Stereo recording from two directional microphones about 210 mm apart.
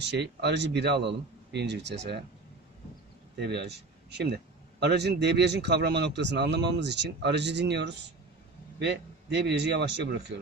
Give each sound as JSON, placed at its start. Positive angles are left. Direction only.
{"t": 0.0, "sound": "a man's voice", "side_deg": -55}
{"t": 3.3, "sound": "speech", "side_deg": -55}
{"t": 9.3, "sound": "speech", "side_deg": -55}